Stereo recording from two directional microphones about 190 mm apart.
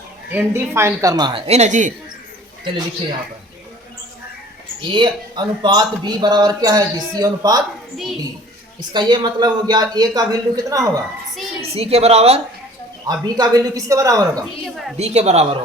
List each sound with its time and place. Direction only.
0.3 s a man's voice: 10° right (ahead or behind); by 1.9 s 40° right (ahead or behind)
4.9 s a man's voice: 25° right (ahead or behind)
8.9 s a man's voice: 25° right (ahead or behind)
11.7 s a woman's voice: 30° right (ahead or behind)
13.1 s a man's voice: 20° right (ahead or behind)
14.9 s a woman's voice: 35° right (ahead or behind)